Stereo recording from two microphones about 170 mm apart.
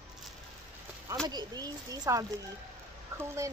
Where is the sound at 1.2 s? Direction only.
25° right (ahead or behind).